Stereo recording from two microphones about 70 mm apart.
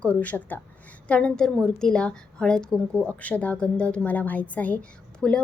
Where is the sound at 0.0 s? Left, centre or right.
Left.